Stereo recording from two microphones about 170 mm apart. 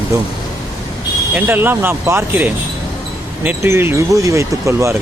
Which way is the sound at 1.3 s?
10° right (ahead or behind).